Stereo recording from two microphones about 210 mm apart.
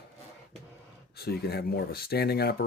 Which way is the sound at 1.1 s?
50° left (ahead or behind).